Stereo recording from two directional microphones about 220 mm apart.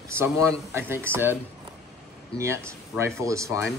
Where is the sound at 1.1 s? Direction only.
10° right (ahead or behind).